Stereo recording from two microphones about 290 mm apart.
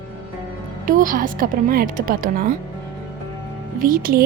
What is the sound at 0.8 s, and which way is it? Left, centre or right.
A woman's voice, right.